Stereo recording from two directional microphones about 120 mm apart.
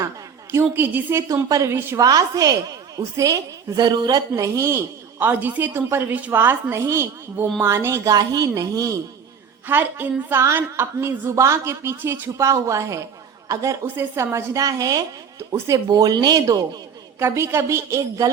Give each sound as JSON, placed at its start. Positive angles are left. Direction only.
{"t": 0.5, "sound": "a woman's voice", "side_deg": -20}
{"t": 9.6, "sound": "a woman's voice", "side_deg": -15}
{"t": 17.2, "sound": "a woman's voice", "side_deg": -20}